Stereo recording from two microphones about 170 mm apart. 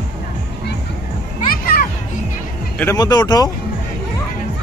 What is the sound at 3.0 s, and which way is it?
Speech, 25° left (ahead or behind).